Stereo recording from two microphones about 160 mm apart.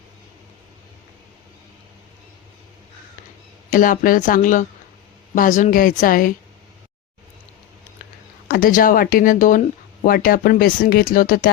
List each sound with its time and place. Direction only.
3.7 s speech: 55° left (ahead or behind)
8.4 s speech: 65° left (ahead or behind)